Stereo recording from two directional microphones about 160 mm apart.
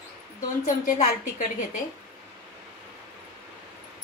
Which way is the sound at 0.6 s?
55° left (ahead or behind).